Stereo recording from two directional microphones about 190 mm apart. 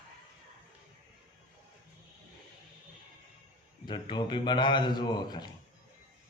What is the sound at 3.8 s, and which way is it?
A man's voice, 25° left (ahead or behind).